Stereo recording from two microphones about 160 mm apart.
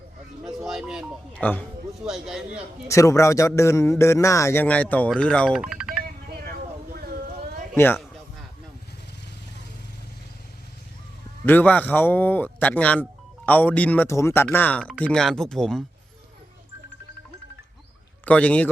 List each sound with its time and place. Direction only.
0.4 s music: 5° right (ahead or behind)
1.3 s speech: 10° left (ahead or behind)
2.0 s a man's voice: centre (ahead or behind)
2.8 s speech: 20° left (ahead or behind)
5.5 s music: 5° right (ahead or behind)
6.3 s vehicle: 70° right (ahead or behind)
7.8 s speech: 15° left (ahead or behind)
11.4 s speech: 10° left (ahead or behind)
18.3 s speech: 10° left (ahead or behind)